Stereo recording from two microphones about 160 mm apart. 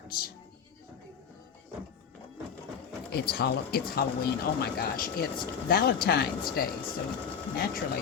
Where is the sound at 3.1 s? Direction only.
85° left.